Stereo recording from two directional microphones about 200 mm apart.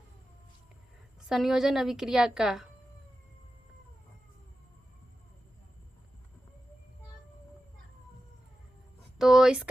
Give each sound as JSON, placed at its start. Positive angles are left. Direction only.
{"t": 1.3, "sound": "a woman's voice", "side_deg": 0}
{"t": 9.1, "sound": "a woman's voice", "side_deg": 0}